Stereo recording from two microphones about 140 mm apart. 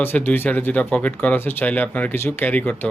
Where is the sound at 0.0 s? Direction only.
15° left (ahead or behind).